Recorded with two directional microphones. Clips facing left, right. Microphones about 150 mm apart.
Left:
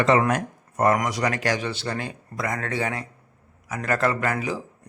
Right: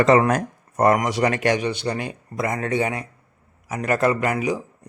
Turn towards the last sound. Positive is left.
turn(degrees=-15)  # may be behind; listen again after turning